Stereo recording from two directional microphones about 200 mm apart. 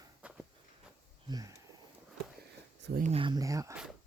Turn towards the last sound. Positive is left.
turn(degrees=-15)  # may be behind; listen again after turning